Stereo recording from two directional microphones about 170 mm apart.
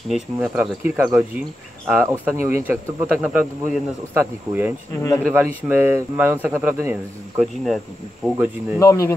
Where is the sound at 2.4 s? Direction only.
10° right (ahead or behind).